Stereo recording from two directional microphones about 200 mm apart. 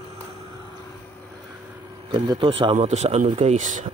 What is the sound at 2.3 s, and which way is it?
Speech, 25° right (ahead or behind).